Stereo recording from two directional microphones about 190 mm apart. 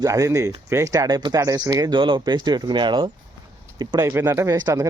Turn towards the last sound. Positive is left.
turn(degrees=-20)  # may be behind; listen again after turning